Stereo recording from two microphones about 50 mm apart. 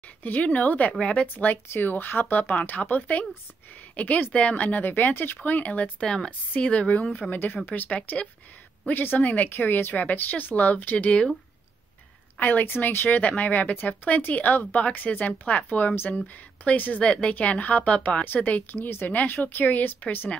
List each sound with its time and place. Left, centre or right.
0.2 s speech: left
6.0 s a woman's voice: centre
6.5 s speech: left
7.2 s speech: centre
7.6 s speech: left
12.4 s speech: left
17.0 s speech: left
18.2 s speech: left